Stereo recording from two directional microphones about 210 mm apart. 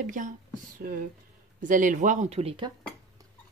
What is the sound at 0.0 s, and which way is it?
Speech, 40° right (ahead or behind).